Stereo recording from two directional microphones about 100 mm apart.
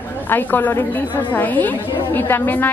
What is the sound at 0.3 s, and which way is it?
A woman's voice, 20° left (ahead or behind).